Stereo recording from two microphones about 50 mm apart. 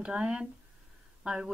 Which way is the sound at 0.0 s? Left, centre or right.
Right.